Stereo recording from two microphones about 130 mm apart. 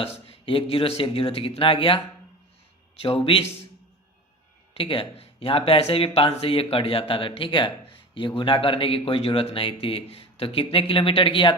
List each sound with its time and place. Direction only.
0.0 s speech: 50° left (ahead or behind)
3.0 s speech: 45° left (ahead or behind)
4.7 s speech: 45° left (ahead or behind)